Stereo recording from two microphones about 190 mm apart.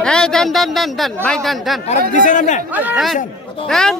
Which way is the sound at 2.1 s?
40° left (ahead or behind).